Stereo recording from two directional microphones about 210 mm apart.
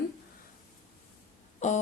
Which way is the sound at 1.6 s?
35° left (ahead or behind).